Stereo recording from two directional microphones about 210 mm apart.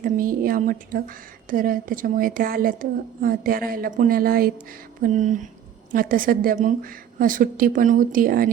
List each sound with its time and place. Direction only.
0.0 s a woman's voice: 40° right (ahead or behind)